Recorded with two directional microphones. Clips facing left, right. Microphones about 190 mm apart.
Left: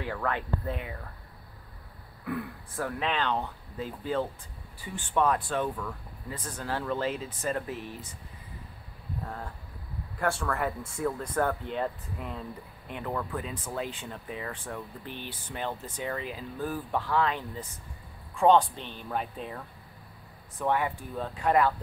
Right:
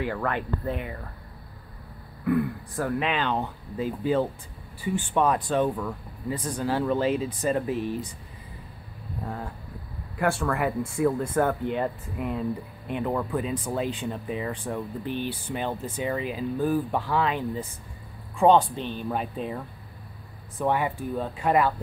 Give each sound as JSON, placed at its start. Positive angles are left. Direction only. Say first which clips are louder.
{"t": 0.0, "sound": "speech", "louder": "right 4 dB", "side_deg": 0}
{"t": 2.2, "sound": "speech", "louder": "right 10 dB", "side_deg": 0}
{"t": 9.2, "sound": "speech", "louder": "right 7 dB", "side_deg": -10}
{"t": 20.6, "sound": "speech", "louder": "right 3 dB", "side_deg": -15}